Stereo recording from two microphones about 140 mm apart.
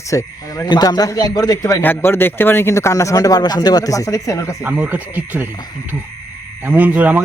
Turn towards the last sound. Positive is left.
turn(degrees=-10)  # may be behind; listen again after turning